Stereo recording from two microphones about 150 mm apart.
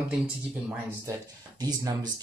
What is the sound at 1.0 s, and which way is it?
Speech, 25° right (ahead or behind).